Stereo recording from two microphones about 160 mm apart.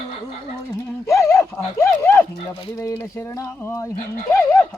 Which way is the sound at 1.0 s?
15° left (ahead or behind).